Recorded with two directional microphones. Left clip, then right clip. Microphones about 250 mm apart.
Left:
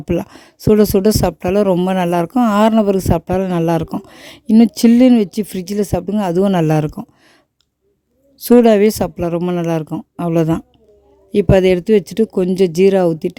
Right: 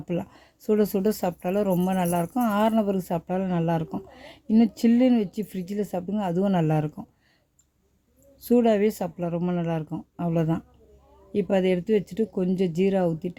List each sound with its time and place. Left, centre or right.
0.0 s speech: left
8.4 s speech: left